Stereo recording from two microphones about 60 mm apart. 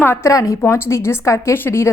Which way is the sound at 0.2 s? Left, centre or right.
Left.